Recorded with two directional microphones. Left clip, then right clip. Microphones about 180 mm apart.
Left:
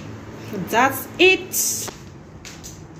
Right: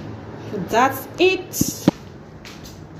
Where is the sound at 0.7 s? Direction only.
Centre (ahead or behind).